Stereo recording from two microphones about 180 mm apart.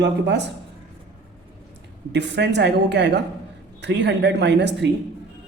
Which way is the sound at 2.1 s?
70° right (ahead or behind).